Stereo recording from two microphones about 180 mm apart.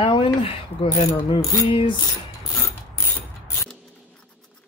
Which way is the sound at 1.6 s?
30° left (ahead or behind).